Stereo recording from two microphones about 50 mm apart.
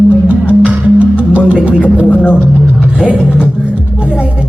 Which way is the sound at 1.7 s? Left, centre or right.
Right.